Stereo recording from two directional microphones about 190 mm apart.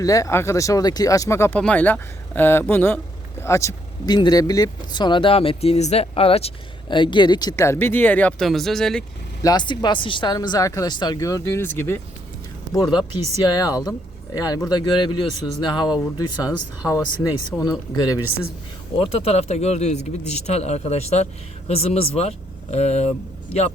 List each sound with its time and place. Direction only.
0.0 s speech: 15° left (ahead or behind)
9.4 s speech: 20° left (ahead or behind)
12.7 s speech: 20° left (ahead or behind)
18.9 s speech: 35° left (ahead or behind)